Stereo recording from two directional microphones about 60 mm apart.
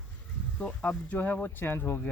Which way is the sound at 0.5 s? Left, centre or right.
Left.